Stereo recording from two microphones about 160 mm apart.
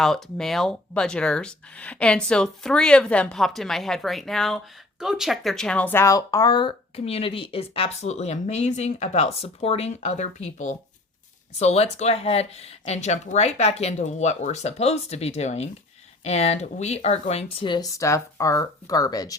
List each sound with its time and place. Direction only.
0.0 s speech: centre (ahead or behind); by 19.4 s 20° left (ahead or behind)